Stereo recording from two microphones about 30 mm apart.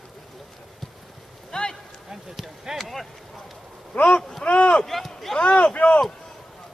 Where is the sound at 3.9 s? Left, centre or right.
Left.